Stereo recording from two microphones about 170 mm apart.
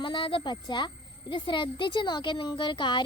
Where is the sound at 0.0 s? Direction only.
30° left (ahead or behind).